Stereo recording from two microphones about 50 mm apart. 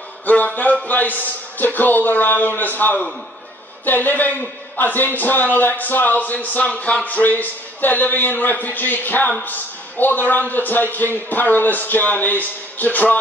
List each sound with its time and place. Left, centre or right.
0.3 s a man's voice: left